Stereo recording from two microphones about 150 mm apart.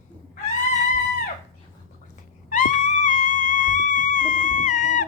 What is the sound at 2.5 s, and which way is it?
Music, 55° left (ahead or behind).